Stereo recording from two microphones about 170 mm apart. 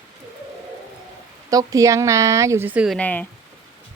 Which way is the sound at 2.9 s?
10° left (ahead or behind).